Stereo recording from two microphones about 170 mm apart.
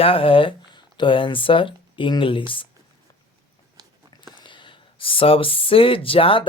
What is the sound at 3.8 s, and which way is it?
Biting, 25° right (ahead or behind).